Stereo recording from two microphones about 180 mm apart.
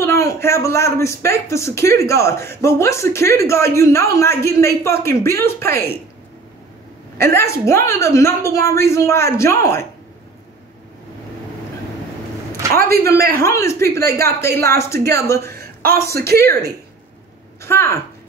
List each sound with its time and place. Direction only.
0.0 s a man's voice: 15° left (ahead or behind)
7.2 s a man's voice: 15° left (ahead or behind)
12.7 s a man's voice: 60° right (ahead or behind)
13.4 s a man's voice: 15° left (ahead or behind)
15.5 s a man's voice: 60° right (ahead or behind)
17.6 s a man's voice: 15° left (ahead or behind)